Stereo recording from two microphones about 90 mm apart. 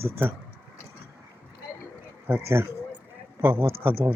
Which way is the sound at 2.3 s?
25° right (ahead or behind).